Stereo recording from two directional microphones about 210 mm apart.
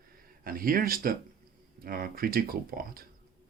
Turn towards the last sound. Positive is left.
turn(degrees=-45)  # may be behind; listen again after turning